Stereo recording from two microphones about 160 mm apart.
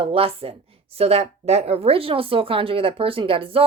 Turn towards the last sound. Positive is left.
turn(degrees=-35)  # may be behind; listen again after turning